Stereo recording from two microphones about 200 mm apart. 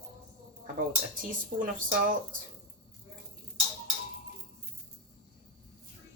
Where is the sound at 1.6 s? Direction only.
40° right (ahead or behind).